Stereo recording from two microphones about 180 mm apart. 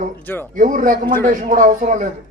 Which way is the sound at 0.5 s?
50° right (ahead or behind).